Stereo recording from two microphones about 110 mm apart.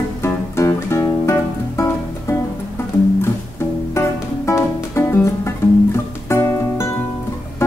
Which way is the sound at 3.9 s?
25° left (ahead or behind).